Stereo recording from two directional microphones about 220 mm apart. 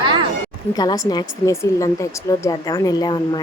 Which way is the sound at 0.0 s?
20° right (ahead or behind).